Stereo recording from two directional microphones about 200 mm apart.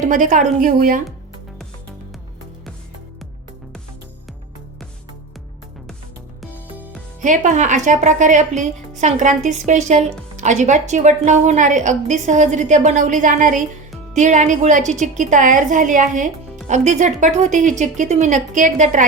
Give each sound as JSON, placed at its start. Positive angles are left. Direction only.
{"t": 0.0, "sound": "a woman's voice", "side_deg": -40}
{"t": 6.4, "sound": "music", "side_deg": -10}
{"t": 7.2, "sound": "a woman's voice", "side_deg": -40}